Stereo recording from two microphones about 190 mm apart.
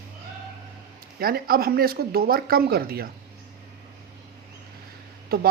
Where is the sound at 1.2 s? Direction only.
50° right (ahead or behind).